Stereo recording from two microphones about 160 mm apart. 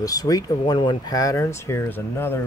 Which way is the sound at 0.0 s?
20° left (ahead or behind).